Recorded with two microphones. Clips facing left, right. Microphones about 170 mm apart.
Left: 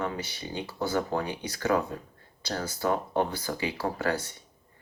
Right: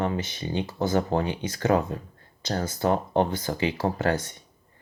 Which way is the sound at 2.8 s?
30° right (ahead or behind).